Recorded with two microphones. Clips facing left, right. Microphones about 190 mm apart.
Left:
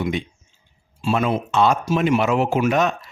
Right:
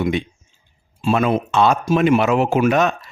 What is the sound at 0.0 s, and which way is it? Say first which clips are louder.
Speech: right 4 dB; 65° right (ahead or behind).